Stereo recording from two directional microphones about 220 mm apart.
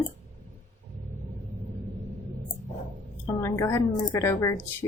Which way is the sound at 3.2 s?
10° left (ahead or behind).